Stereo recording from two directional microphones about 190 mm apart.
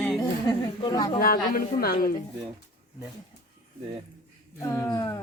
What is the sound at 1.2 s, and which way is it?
Speech, 50° left (ahead or behind).